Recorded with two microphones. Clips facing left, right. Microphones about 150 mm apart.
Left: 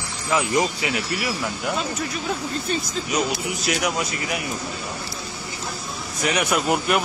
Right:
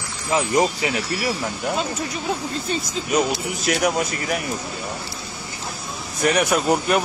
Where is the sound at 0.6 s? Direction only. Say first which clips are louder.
Right 3 dB; 35° right (ahead or behind).